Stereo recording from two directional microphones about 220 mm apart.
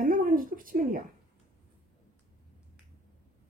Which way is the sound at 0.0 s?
40° right (ahead or behind).